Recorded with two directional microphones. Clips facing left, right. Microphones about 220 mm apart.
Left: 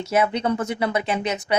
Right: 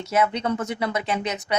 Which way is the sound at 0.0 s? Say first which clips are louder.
Left 2 dB; 10° left (ahead or behind).